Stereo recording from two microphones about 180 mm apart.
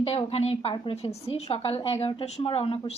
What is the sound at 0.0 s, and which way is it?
A woman's voice, 30° left (ahead or behind).